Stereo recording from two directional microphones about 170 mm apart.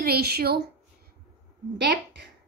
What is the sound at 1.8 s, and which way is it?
Speech, 80° right.